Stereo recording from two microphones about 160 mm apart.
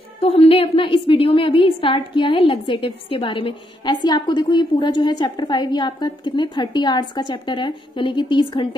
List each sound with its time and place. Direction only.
0.2 s a woman's voice: 40° left (ahead or behind)